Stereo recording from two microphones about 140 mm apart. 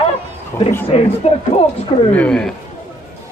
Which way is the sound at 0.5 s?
20° left (ahead or behind).